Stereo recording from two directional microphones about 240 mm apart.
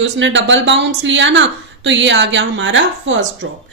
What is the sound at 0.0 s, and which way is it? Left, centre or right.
Speech, right.